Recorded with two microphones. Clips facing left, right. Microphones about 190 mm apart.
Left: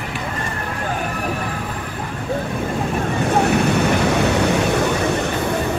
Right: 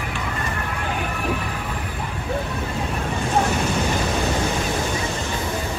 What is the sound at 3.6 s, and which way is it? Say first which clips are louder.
Vehicle: left 6 dB; 65° left (ahead or behind).